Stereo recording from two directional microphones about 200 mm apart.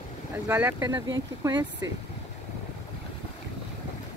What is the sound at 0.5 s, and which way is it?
Speech, 10° right (ahead or behind).